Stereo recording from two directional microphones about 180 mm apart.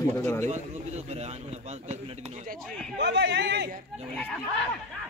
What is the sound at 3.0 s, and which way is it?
Speech, 70° right (ahead or behind).